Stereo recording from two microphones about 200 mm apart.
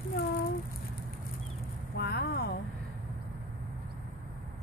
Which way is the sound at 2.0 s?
50° left (ahead or behind).